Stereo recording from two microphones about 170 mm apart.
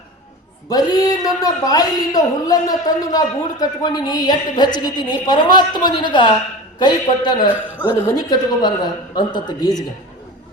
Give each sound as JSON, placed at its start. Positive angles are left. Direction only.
{"t": 0.7, "sound": "a man's voice", "side_deg": 20}
{"t": 7.5, "sound": "a man's voice", "side_deg": -10}
{"t": 8.0, "sound": "a man's voice", "side_deg": 25}